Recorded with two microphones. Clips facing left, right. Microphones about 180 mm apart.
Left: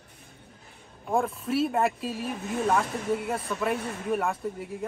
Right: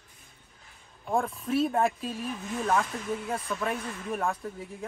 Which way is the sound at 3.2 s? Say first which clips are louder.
Left 3 dB; 5° left (ahead or behind).